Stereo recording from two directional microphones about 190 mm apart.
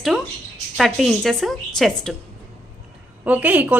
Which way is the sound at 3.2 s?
10° right (ahead or behind).